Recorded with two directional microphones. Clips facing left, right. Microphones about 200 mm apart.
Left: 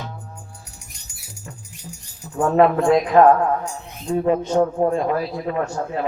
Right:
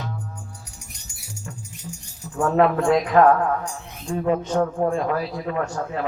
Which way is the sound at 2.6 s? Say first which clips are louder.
Left 3 dB; 20° left (ahead or behind).